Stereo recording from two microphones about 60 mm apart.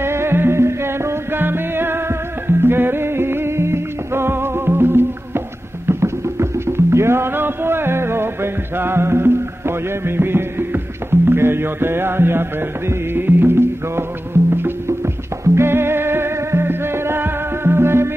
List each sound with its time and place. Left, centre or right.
0.0 s music: right